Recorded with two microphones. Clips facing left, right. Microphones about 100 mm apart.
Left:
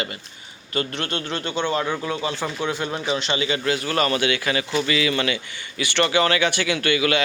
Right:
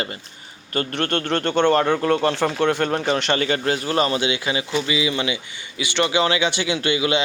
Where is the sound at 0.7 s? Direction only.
45° right (ahead or behind).